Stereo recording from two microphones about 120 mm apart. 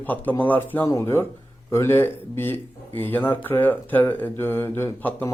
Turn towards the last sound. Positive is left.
turn(degrees=20)  # may be behind; listen again after turning